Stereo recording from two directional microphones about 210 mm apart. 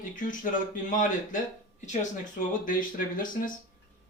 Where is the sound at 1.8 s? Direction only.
35° left (ahead or behind).